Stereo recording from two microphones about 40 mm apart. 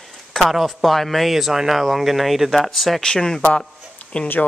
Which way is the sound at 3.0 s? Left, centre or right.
Centre.